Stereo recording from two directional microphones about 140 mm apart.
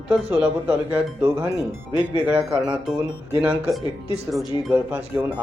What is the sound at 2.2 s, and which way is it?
Speech, 10° right (ahead or behind).